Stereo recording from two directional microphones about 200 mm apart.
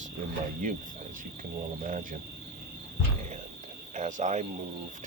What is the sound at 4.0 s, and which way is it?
Speech, 40° right (ahead or behind).